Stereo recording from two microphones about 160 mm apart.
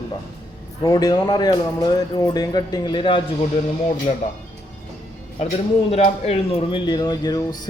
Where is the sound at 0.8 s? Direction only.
25° left (ahead or behind).